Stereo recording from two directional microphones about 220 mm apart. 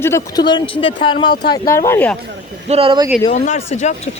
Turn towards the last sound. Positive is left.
turn(degrees=30)  # may be behind; listen again after turning